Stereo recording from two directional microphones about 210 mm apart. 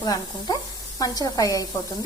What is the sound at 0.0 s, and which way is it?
A woman's voice, 20° left (ahead or behind).